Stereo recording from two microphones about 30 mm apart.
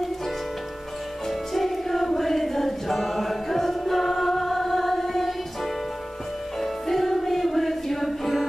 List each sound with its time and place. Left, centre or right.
1.5 s music: centre
6.6 s music: centre